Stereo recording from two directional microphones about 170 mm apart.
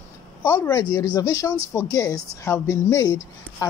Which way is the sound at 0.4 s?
15° left (ahead or behind).